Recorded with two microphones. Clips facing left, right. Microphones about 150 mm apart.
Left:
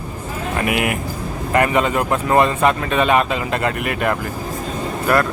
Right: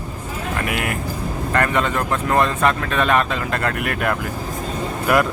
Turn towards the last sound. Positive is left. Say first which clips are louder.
# even
turn(degrees=-5)  # may be behind; listen again after turning